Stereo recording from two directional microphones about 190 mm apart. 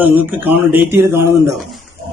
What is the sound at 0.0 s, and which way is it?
Speech, 10° right (ahead or behind).